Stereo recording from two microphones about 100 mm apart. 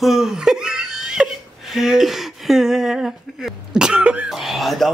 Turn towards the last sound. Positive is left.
turn(degrees=0)  # may be behind; listen again after turning